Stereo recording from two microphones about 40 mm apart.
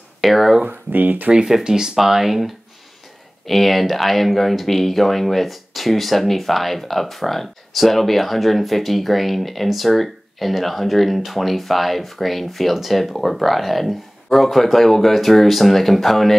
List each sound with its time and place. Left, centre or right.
0.2 s speech: centre
0.7 s speech: right
1.3 s speech: centre